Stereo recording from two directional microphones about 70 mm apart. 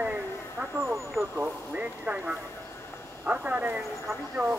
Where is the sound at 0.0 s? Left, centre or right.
Right.